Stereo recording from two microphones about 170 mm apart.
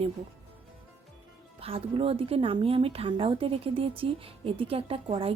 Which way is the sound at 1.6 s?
35° right (ahead or behind).